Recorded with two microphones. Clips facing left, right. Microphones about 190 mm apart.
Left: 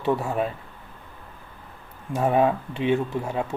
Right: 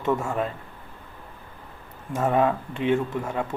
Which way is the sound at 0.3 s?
15° left (ahead or behind).